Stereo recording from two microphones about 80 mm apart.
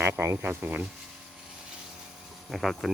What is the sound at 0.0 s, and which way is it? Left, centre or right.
Speech, right.